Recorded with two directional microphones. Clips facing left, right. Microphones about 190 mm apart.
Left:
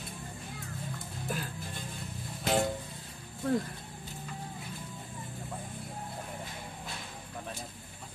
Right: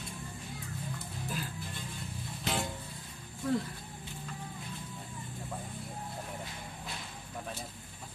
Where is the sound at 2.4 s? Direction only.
45° left (ahead or behind).